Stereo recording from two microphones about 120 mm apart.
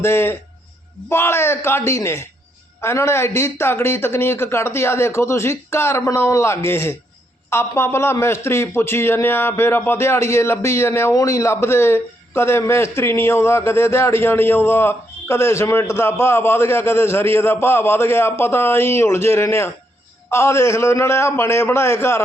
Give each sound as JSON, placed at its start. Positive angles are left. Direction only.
{"t": 0.0, "sound": "a man's voice", "side_deg": 20}